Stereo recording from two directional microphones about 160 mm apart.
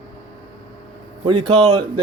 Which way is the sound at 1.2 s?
35° right (ahead or behind).